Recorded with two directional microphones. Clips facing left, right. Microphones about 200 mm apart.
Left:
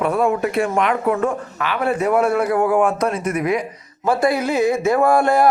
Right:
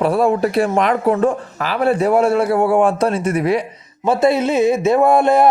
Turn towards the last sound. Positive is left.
turn(degrees=-20)  # may be behind; listen again after turning